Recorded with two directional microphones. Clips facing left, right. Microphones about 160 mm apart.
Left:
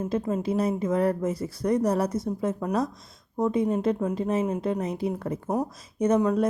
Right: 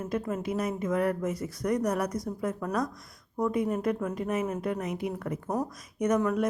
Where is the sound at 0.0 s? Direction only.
30° left (ahead or behind).